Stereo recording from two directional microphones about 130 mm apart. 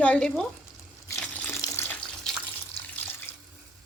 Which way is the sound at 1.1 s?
10° left (ahead or behind).